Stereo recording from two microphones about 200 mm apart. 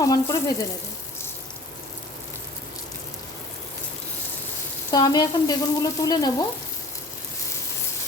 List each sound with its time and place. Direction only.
0.0 s frying: 15° left (ahead or behind)
4.9 s frying: 20° left (ahead or behind)